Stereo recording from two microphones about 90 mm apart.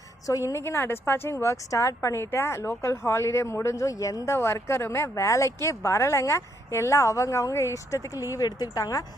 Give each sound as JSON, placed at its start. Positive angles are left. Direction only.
{"t": 0.5, "sound": "speech", "side_deg": 30}
{"t": 4.4, "sound": "a woman's voice", "side_deg": 30}